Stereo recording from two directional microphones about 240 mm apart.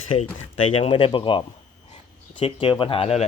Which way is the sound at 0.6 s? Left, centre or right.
Left.